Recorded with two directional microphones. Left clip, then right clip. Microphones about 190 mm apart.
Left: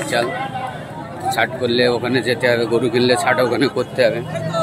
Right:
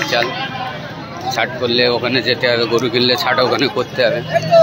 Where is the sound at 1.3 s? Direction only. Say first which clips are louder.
Right 1 dB; 20° left (ahead or behind).